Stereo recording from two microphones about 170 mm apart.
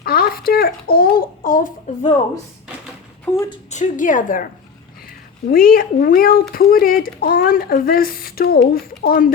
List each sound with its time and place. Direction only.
0.0 s a sound: 60° left (ahead or behind)
3.3 s speech: 20° left (ahead or behind)
3.7 s a woman's voice: 45° left (ahead or behind)